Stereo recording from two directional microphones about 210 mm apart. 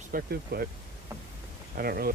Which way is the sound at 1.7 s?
45° right (ahead or behind).